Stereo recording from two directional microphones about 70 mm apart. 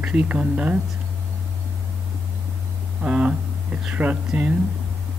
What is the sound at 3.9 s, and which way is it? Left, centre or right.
Speech, right.